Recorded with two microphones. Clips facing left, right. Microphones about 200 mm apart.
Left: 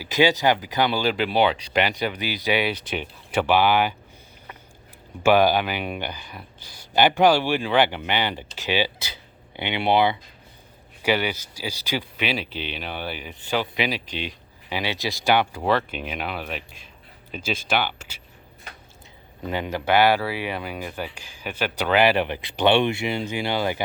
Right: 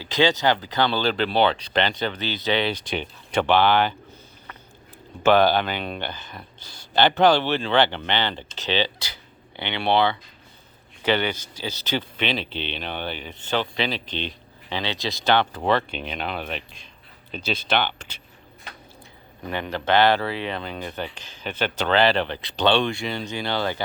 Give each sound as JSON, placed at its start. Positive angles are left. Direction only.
{"t": 0.0, "sound": "speech", "side_deg": 15}
{"t": 5.2, "sound": "speech", "side_deg": 10}
{"t": 19.5, "sound": "speech", "side_deg": 15}